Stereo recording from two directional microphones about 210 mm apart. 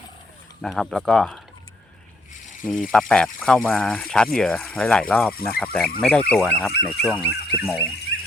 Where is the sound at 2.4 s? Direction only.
40° left (ahead or behind).